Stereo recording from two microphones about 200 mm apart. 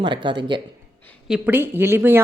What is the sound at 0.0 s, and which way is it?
Speech, 25° right (ahead or behind).